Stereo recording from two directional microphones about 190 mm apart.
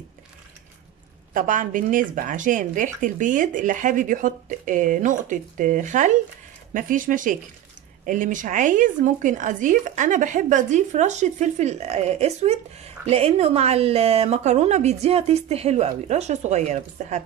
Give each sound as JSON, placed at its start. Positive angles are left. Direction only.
{"t": 1.3, "sound": "a woman's voice", "side_deg": -45}